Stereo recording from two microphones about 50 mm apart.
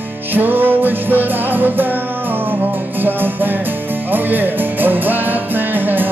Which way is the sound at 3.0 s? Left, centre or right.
Right.